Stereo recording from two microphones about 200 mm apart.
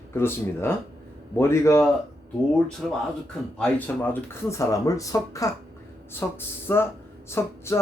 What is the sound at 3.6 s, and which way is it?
Speech, 10° left (ahead or behind).